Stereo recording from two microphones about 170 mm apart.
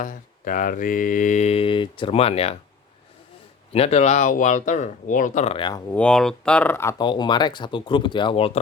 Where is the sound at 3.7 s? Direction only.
40° left (ahead or behind).